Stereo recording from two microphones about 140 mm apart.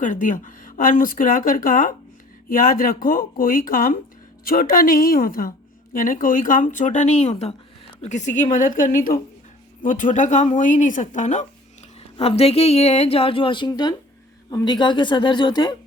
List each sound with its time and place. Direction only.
0.0 s a woman's voice: 70° left (ahead or behind)
4.4 s a woman's voice: 90° left; by 7.5 s 50° left (ahead or behind)
8.0 s a woman's voice: 60° left (ahead or behind); by 9.2 s 85° left
9.8 s speech: 70° left (ahead or behind)
12.1 s a woman's voice: 45° left (ahead or behind)